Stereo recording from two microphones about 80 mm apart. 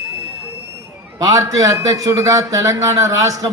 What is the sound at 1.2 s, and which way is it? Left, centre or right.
A man's voice, right.